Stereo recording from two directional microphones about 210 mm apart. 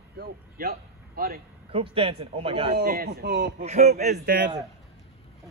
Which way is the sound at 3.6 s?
30° right (ahead or behind).